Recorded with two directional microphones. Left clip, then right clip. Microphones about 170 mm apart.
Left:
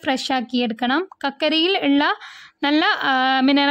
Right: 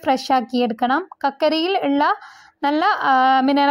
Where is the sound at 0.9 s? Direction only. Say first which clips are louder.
Right 2 dB; 25° left (ahead or behind).